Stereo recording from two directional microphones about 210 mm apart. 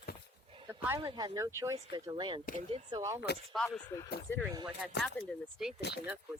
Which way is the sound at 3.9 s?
20° left (ahead or behind).